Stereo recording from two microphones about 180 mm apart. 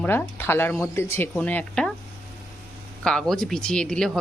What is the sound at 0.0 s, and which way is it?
Speech, 10° left (ahead or behind).